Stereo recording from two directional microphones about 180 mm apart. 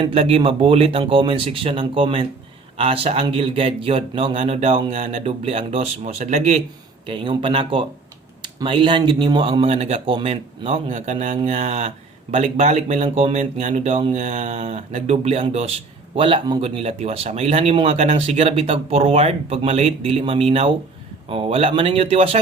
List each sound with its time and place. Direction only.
0.0 s speech: 30° right (ahead or behind)